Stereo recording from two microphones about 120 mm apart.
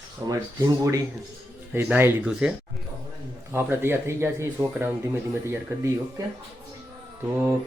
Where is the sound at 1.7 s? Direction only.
20° right (ahead or behind).